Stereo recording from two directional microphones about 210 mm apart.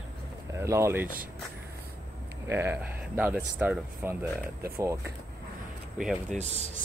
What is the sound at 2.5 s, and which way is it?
Speech, 10° right (ahead or behind).